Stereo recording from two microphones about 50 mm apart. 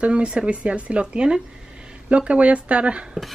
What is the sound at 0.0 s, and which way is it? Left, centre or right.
Speech, right.